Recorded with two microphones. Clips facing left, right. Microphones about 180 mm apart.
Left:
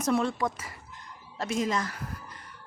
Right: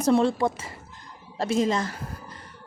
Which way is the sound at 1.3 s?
30° right (ahead or behind).